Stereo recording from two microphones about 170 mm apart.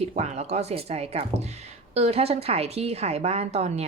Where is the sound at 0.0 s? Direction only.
40° right (ahead or behind).